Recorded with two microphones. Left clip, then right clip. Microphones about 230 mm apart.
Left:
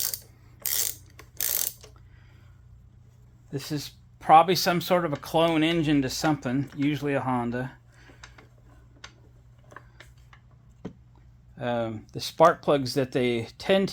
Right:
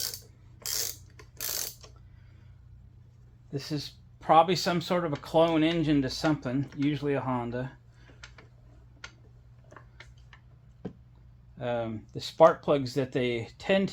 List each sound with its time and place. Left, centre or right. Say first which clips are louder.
0.6 s mechanisms: left 2 dB; left
3.5 s speech: left 2 dB; left
11.5 s speech: left 3 dB; left